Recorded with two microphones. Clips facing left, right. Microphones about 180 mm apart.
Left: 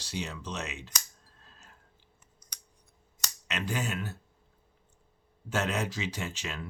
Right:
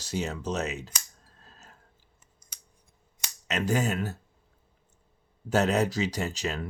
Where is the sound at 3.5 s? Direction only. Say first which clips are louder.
Right 7 dB; 40° right (ahead or behind).